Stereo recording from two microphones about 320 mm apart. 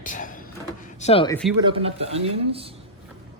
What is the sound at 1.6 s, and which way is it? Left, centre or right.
Speech, centre.